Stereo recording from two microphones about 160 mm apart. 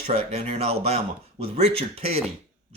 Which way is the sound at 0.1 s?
40° right (ahead or behind).